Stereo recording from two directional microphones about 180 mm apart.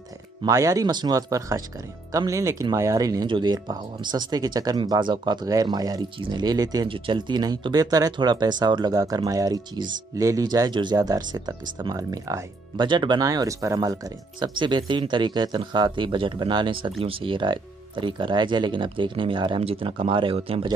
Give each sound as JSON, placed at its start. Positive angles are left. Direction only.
{"t": 0.4, "sound": "speech", "side_deg": -20}